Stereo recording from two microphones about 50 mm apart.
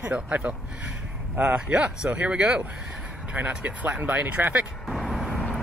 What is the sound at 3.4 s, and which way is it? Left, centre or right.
Speech, right.